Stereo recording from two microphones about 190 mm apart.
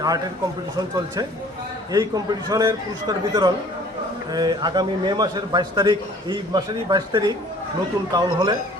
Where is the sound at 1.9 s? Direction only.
20° right (ahead or behind).